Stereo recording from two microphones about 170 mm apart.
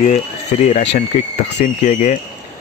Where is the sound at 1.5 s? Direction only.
45° left (ahead or behind).